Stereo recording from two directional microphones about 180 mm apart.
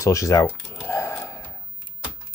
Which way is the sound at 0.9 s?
10° left (ahead or behind).